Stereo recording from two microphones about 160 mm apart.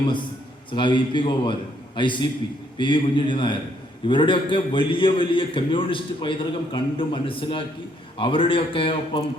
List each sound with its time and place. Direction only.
0.7 s a man's voice: 30° left (ahead or behind)